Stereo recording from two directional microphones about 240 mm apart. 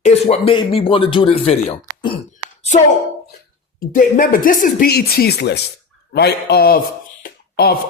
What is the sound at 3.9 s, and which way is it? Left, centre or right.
A man's voice, left.